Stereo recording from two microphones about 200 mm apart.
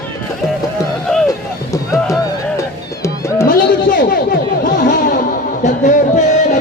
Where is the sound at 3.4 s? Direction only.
45° left (ahead or behind).